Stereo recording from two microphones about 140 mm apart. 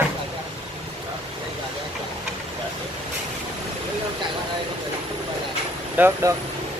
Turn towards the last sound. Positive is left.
turn(degrees=-15)  # may be behind; listen again after turning